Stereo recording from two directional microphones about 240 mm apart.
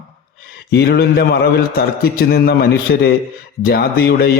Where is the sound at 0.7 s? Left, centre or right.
Left.